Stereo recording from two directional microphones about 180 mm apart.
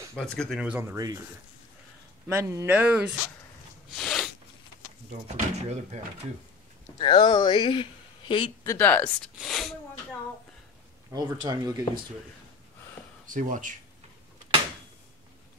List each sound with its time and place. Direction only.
0.1 s speech: 5° left (ahead or behind); by 1.2 s 20° right (ahead or behind)
2.2 s speech: 15° right (ahead or behind)
3.9 s a sound: centre (ahead or behind)
5.6 s speech: 35° right (ahead or behind)
7.0 s speech: 25° left (ahead or behind)
8.6 s speech: 10° left (ahead or behind)
11.1 s speech: 20° right (ahead or behind)
13.3 s speech: 45° right (ahead or behind)